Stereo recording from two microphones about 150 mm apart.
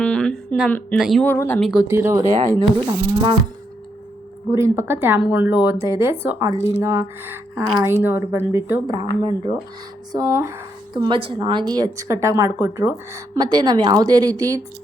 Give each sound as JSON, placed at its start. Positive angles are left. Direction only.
{"t": 0.0, "sound": "a sound", "side_deg": 5}
{"t": 0.9, "sound": "speech", "side_deg": 0}
{"t": 1.2, "sound": "speech", "side_deg": 15}
{"t": 1.9, "sound": "a woman's voice", "side_deg": -15}
{"t": 4.5, "sound": "speech", "side_deg": -20}
{"t": 9.2, "sound": "speech", "side_deg": -30}
{"t": 10.1, "sound": "a woman's voice", "side_deg": -20}
{"t": 10.9, "sound": "a woman's voice", "side_deg": -30}